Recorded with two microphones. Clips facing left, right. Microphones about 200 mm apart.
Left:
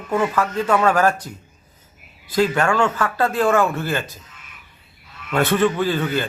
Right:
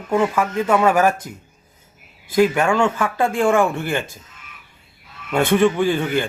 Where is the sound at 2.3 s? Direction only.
10° right (ahead or behind).